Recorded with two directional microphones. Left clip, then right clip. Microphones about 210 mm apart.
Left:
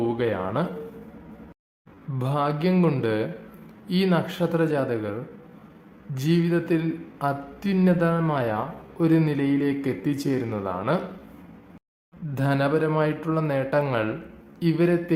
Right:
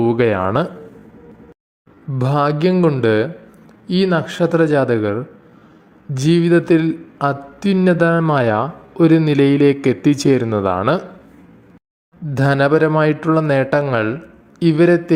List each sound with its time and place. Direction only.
0.0 s a man's voice: 35° right (ahead or behind)
2.1 s a man's voice: 30° right (ahead or behind)
12.3 s a man's voice: 30° right (ahead or behind)